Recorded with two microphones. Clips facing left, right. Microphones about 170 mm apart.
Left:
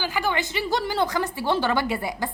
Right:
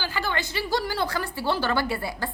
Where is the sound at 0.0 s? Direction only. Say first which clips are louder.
Left 3 dB; 15° left (ahead or behind).